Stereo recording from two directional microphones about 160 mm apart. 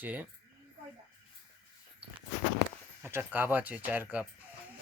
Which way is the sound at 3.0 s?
15° right (ahead or behind).